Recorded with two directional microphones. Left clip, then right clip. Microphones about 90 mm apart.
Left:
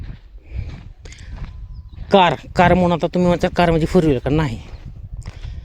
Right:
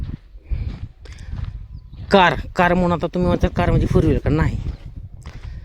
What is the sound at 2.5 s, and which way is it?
Speech, 15° left (ahead or behind).